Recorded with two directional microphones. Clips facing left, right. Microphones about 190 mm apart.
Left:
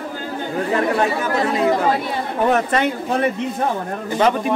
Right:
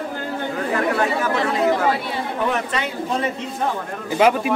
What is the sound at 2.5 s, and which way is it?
Speech, 50° left (ahead or behind).